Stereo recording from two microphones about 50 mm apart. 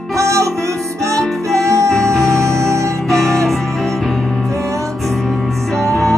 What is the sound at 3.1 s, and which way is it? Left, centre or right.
Music, centre.